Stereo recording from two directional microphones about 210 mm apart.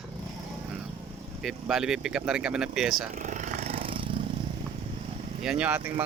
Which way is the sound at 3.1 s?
35° right (ahead or behind).